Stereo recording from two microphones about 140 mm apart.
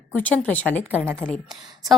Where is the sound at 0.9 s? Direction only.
15° right (ahead or behind).